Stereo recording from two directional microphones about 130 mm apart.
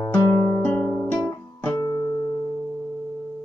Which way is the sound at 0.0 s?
20° left (ahead or behind).